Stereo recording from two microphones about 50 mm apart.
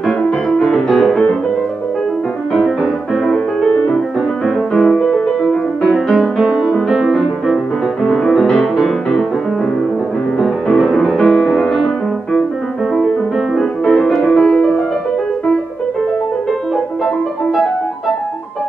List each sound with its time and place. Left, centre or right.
0.2 s music: centre
2.5 s music: centre
3.7 s music: left
4.7 s music: centre
10.4 s music: centre
13.6 s music: centre